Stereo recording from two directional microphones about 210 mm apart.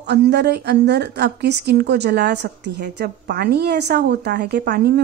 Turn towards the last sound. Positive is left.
turn(degrees=-50)  # may be behind; listen again after turning